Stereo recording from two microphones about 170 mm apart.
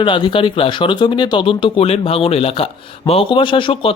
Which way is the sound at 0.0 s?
30° left (ahead or behind).